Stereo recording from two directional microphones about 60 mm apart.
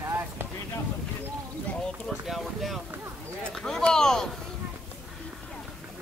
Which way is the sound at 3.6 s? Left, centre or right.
Centre.